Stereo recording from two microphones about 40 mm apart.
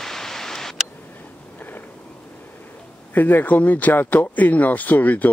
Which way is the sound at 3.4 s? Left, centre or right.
Left.